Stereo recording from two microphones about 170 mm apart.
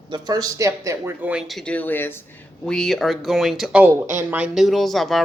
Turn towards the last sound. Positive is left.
turn(degrees=0)  # may be behind; listen again after turning